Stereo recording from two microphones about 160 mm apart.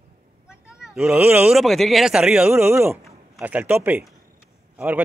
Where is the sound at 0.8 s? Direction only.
5° right (ahead or behind).